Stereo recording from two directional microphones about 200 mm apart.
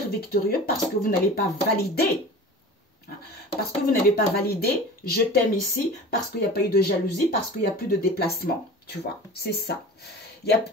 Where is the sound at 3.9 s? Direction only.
50° left (ahead or behind).